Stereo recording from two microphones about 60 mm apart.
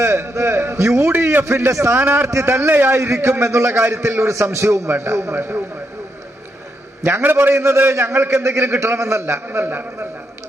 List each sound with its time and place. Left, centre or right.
0.0 s a sound: right
1.3 s a man's voice: right
2.2 s a man's voice: right
2.5 s a man's voice: right
4.9 s a man's voice: right
7.1 s a man's voice: right
7.5 s a man's voice: right